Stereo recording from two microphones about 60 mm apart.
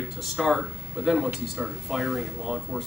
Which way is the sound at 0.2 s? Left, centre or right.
Centre.